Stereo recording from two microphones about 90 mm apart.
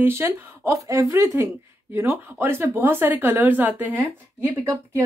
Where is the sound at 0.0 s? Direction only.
30° right (ahead or behind).